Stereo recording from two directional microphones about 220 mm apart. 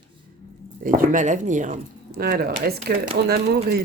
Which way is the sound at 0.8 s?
35° right (ahead or behind).